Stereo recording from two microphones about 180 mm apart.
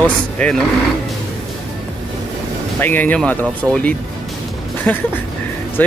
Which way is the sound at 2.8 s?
10° left (ahead or behind).